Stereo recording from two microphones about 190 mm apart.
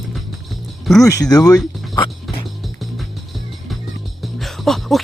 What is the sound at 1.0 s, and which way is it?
Speech, 15° left (ahead or behind).